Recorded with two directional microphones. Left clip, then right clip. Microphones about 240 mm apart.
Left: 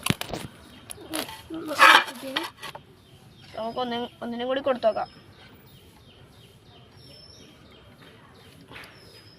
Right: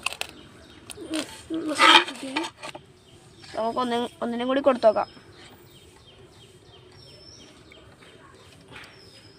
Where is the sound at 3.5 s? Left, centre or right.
Right.